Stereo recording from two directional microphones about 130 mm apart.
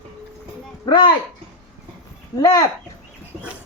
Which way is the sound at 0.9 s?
35° left (ahead or behind).